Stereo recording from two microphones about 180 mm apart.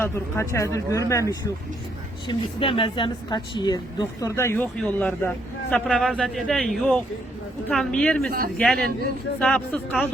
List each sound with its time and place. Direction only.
0.0 s speech: 15° left (ahead or behind)
2.2 s speech: 30° left (ahead or behind); by 10.0 s 5° left (ahead or behind)